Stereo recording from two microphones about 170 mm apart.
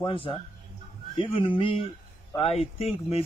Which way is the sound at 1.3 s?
30° left (ahead or behind).